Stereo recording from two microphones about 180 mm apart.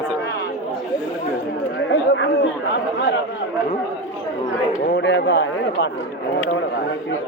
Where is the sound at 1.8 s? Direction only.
90° left.